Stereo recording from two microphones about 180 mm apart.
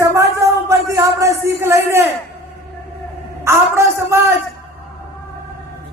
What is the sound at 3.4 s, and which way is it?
Music, 15° right (ahead or behind).